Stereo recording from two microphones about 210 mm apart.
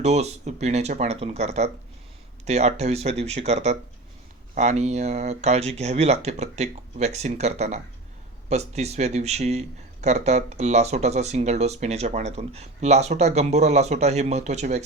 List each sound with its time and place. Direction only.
0.0 s speech: 30° right (ahead or behind)